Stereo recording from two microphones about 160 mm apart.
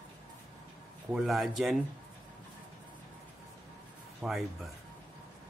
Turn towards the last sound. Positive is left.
turn(degrees=0)  # may be behind; listen again after turning